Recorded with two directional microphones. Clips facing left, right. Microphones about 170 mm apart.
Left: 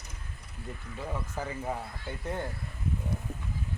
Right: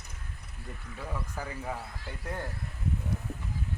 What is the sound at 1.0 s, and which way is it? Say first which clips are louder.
Speech: left 2 dB; 15° left (ahead or behind).